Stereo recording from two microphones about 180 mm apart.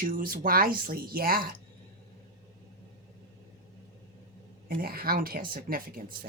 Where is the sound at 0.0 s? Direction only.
50° right (ahead or behind).